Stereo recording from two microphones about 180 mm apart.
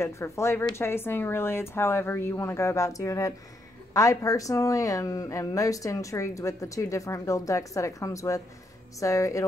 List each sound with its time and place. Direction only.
0.0 s speech: 15° left (ahead or behind)